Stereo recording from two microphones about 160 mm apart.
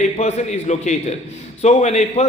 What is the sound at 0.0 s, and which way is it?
A man's voice, 45° left (ahead or behind).